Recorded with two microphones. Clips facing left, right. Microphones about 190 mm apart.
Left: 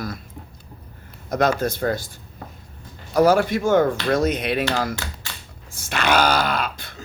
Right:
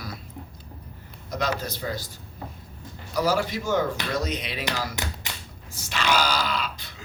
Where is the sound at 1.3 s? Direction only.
50° left (ahead or behind).